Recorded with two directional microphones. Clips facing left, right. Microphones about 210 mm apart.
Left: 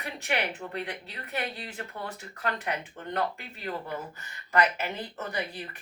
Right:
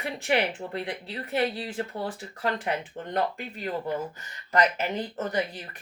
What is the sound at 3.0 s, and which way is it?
Speech, 20° right (ahead or behind).